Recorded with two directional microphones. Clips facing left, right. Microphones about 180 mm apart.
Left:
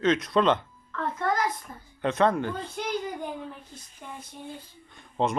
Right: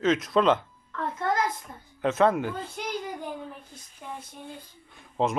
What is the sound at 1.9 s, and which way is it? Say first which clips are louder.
Speech: right 1 dB; 5° right (ahead or behind).